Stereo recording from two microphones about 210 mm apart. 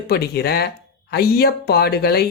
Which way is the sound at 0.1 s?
50° left (ahead or behind).